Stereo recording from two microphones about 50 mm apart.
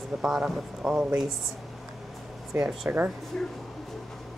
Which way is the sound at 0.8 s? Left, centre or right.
Centre.